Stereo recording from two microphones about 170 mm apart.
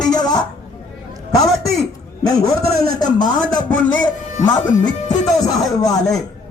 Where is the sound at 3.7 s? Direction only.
10° left (ahead or behind).